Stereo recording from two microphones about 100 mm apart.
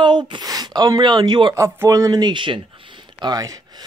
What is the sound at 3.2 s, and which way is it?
Speech, 40° right (ahead or behind).